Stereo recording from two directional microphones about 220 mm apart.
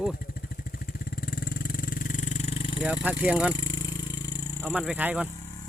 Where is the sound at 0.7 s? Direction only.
40° left (ahead or behind); by 2.8 s 25° left (ahead or behind).